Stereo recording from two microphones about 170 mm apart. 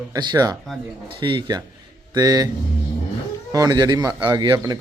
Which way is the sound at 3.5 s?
20° right (ahead or behind).